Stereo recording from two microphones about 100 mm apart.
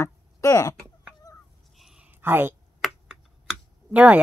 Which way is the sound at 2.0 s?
20° right (ahead or behind).